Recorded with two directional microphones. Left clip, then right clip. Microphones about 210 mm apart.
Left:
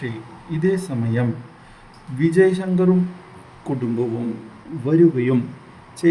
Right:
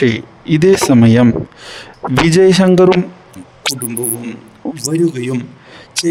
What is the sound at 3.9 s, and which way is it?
Speech, centre (ahead or behind).